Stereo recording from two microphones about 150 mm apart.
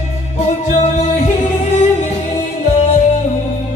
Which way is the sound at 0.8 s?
50° left (ahead or behind).